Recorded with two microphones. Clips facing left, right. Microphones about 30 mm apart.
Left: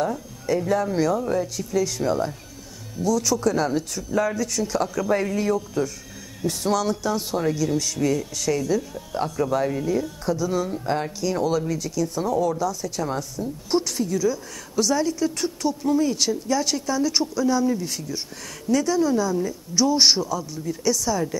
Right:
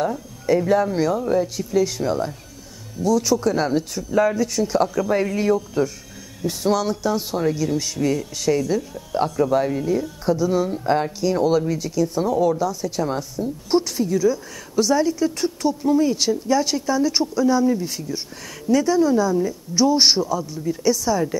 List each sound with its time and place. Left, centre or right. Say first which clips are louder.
0.5 s speech: right 4 dB; centre
10.2 s speech: right 7 dB; centre